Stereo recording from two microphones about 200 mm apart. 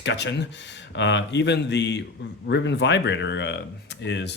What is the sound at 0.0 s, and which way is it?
Speech, 60° left (ahead or behind).